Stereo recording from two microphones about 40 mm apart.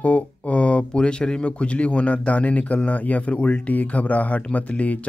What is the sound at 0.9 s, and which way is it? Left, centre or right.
Speech, left.